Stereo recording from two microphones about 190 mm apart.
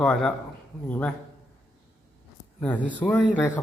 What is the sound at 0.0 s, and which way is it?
A man's voice, 5° left (ahead or behind).